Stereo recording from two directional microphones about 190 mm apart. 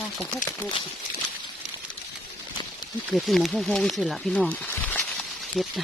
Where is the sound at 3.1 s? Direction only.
Centre (ahead or behind).